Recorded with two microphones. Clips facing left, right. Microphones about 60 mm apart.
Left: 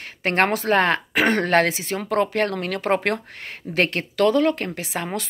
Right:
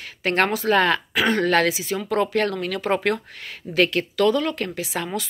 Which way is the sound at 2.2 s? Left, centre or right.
Left.